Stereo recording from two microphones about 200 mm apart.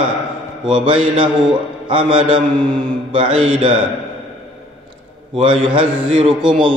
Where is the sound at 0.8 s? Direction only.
25° right (ahead or behind).